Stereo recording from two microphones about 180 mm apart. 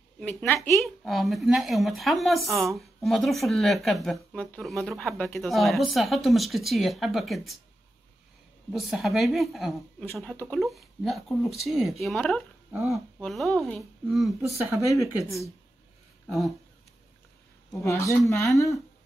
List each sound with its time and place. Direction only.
0.2 s speech: 5° left (ahead or behind)
8.7 s speech: centre (ahead or behind)
15.0 s speech: 15° right (ahead or behind)
16.3 s speech: centre (ahead or behind)
17.7 s speech: 15° left (ahead or behind)